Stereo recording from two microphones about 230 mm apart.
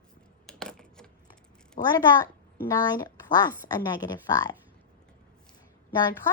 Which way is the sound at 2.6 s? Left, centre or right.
Centre.